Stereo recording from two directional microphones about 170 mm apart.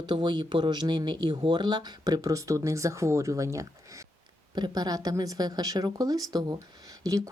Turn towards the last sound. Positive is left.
turn(degrees=-20)  # may be behind; listen again after turning